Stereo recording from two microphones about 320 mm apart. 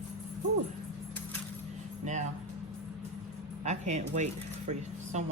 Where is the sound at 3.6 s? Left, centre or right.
Right.